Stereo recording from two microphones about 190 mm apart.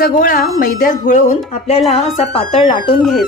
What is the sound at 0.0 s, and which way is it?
A woman's voice, 50° left (ahead or behind).